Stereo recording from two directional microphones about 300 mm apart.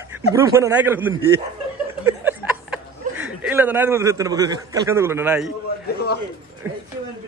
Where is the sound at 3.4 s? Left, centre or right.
Centre.